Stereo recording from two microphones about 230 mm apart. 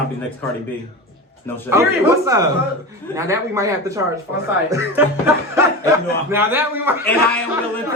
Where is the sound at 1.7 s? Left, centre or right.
Centre.